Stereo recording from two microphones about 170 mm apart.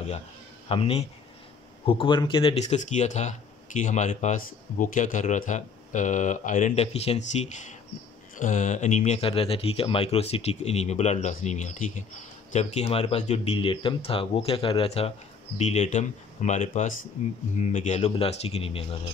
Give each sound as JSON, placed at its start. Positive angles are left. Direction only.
{"t": 0.7, "sound": "speech", "side_deg": 35}